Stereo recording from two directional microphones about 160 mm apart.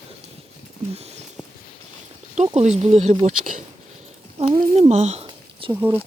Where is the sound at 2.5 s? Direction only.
40° right (ahead or behind).